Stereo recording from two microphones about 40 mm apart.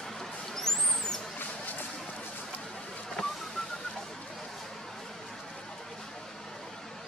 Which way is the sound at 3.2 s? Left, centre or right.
Centre.